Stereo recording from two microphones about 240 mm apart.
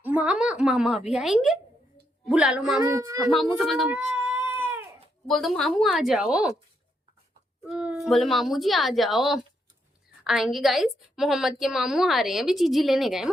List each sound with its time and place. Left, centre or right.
0.0 s a woman's voice: centre
2.8 s speech: centre
3.2 s cat: centre
5.3 s a woman's voice: centre
7.7 s a woman's voice: centre